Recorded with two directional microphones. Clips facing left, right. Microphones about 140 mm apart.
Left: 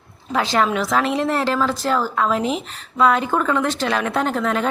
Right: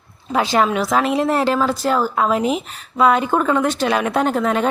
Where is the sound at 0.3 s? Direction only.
15° right (ahead or behind).